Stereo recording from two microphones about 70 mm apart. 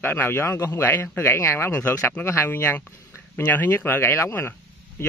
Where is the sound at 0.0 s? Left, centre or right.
Left.